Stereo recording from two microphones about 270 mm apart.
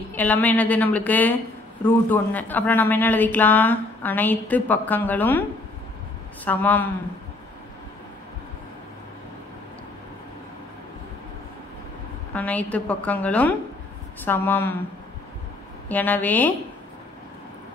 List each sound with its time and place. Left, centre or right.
0.1 s speech: centre
6.4 s a woman's voice: centre
12.4 s a woman's voice: centre
15.9 s speech: centre